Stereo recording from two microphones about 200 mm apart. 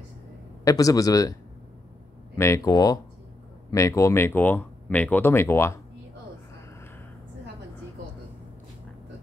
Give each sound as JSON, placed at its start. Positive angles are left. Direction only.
{"t": 0.7, "sound": "speech", "side_deg": 15}
{"t": 2.3, "sound": "speech", "side_deg": 15}